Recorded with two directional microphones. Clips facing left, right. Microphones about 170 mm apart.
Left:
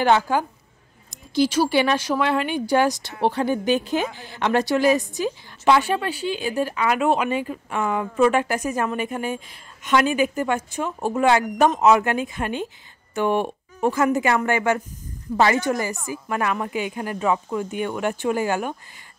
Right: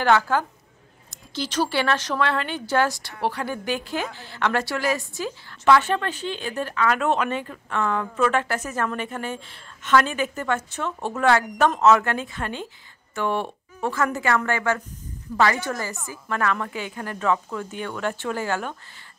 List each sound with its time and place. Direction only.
0.0 s speech: 15° left (ahead or behind)